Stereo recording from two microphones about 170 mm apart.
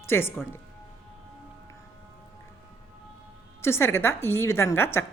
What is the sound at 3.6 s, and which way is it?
Speech, 15° left (ahead or behind).